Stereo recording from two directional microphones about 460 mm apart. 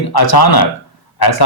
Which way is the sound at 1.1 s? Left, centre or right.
Left.